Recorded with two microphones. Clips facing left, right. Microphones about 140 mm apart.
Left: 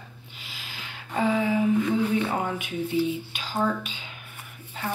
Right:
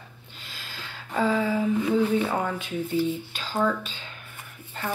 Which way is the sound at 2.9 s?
45° right (ahead or behind).